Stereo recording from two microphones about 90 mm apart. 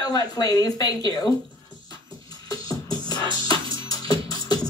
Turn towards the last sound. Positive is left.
turn(degrees=45)  # may be behind; listen again after turning